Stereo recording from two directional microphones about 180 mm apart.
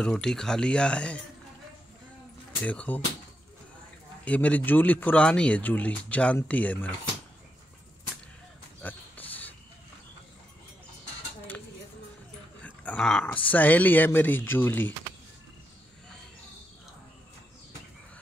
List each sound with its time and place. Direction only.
0.0 s speech: 5° left (ahead or behind)
2.6 s speech: 5° left (ahead or behind)
4.2 s speech: 10° left (ahead or behind)
8.8 s a sound: 10° left (ahead or behind)
12.6 s speech: 5° left (ahead or behind)